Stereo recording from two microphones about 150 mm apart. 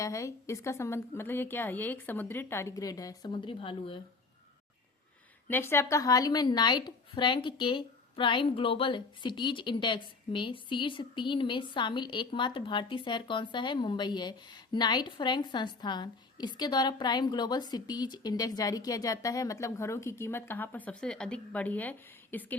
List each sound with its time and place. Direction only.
0.0 s a woman's voice: 20° left (ahead or behind); by 4.0 s 35° left (ahead or behind)
5.5 s a woman's voice: 15° left (ahead or behind)